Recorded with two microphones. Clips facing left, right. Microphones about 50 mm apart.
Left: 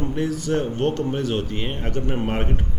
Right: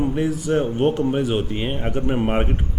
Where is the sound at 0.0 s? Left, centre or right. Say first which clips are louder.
Right 3 dB; centre.